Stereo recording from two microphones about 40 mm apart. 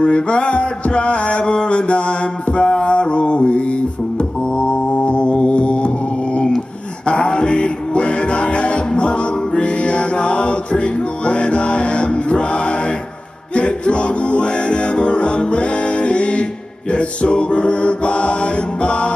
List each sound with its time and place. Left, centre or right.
0.0 s music: left